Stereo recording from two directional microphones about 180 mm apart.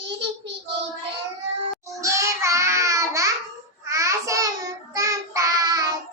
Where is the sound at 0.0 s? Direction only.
75° right (ahead or behind).